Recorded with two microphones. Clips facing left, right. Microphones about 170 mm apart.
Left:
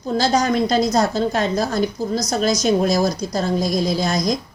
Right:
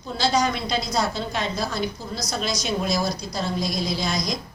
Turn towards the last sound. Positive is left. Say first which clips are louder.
# left 6 dB
turn(degrees=45)  # may be behind; listen again after turning